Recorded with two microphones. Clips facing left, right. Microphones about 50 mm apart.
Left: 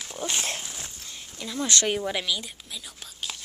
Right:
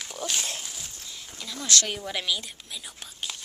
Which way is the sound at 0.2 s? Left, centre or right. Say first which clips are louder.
Left 2 dB; left.